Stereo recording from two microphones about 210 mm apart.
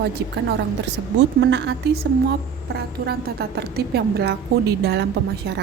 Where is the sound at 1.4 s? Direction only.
60° right (ahead or behind).